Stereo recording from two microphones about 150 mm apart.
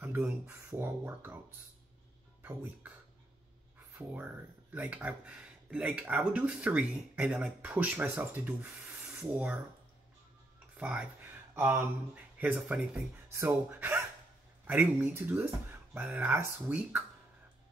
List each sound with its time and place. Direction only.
0.0 s speech: 10° right (ahead or behind)
4.7 s speech: 10° right (ahead or behind)
10.8 s speech: 10° right (ahead or behind)